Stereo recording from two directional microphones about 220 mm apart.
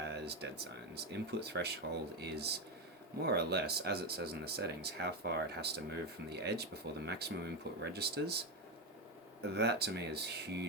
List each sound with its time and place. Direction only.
0.0 s a sound: 50° right (ahead or behind)
0.6 s speech: 50° right (ahead or behind)
9.4 s speech: 50° right (ahead or behind)